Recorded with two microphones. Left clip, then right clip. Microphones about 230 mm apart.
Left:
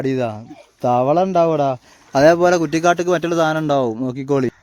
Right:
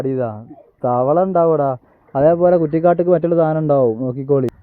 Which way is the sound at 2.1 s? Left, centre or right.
Left.